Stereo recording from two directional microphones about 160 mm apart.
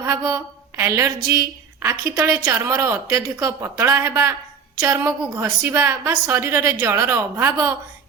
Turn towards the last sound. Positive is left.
turn(degrees=-15)  # may be behind; listen again after turning